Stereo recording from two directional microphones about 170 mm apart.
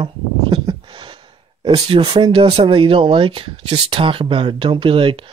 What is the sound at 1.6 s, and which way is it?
Speech, 30° right (ahead or behind).